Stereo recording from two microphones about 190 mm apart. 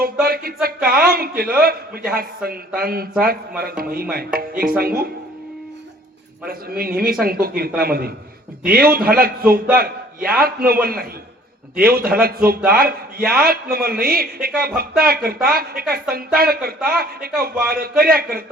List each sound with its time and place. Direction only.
0.0 s a man's voice: 50° right (ahead or behind)
6.4 s a man's voice: 55° right (ahead or behind)